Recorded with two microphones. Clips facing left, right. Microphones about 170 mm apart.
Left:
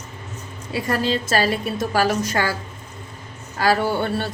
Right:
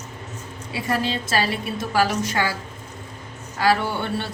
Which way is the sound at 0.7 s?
45° left (ahead or behind).